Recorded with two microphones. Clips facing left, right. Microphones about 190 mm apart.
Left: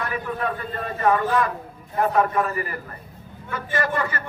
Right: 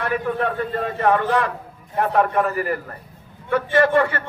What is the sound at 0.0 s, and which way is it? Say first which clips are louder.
A man's voice: right 5 dB; 65° right (ahead or behind).